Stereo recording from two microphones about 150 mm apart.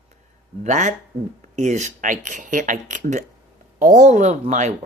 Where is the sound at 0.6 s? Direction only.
50° right (ahead or behind).